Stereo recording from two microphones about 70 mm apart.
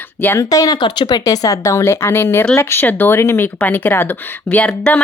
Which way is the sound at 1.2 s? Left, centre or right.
Left.